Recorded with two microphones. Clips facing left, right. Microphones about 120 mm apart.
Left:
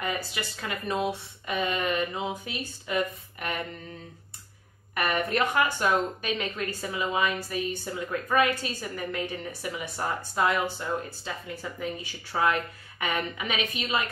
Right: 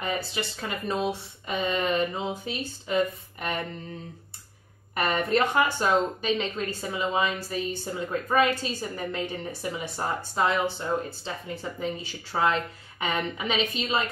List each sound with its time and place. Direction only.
0.0 s speech: 25° right (ahead or behind)
4.9 s speech: 30° right (ahead or behind)